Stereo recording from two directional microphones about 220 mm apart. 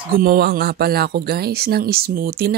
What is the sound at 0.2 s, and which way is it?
Speech, 45° right (ahead or behind).